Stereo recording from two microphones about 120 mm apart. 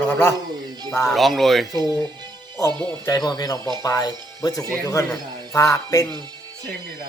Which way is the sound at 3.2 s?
30° left (ahead or behind).